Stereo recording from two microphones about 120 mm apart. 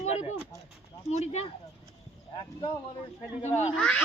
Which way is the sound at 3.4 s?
70° left (ahead or behind).